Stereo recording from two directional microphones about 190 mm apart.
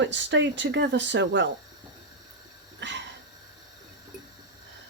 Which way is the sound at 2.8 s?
70° right (ahead or behind).